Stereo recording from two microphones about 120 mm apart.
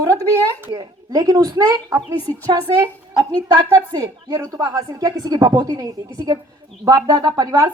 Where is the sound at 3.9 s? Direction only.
30° right (ahead or behind).